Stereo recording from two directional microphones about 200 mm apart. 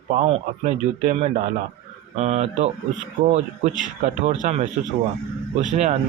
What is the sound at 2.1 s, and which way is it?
Speech, 35° right (ahead or behind).